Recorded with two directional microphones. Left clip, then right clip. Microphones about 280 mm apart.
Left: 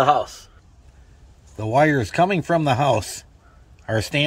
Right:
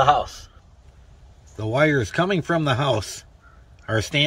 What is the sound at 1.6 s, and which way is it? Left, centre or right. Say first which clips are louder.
Speech: left 2 dB; centre.